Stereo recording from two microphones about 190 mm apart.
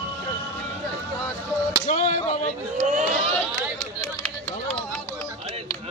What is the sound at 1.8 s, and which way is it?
Speech, 35° left (ahead or behind).